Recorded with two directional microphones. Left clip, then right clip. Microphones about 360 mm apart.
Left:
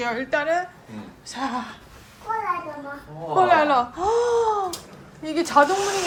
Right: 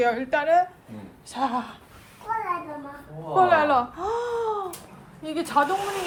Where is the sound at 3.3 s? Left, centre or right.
Centre.